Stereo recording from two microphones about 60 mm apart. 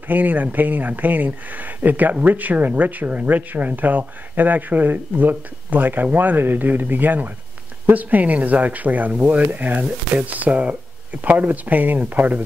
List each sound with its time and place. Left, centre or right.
0.1 s speech: right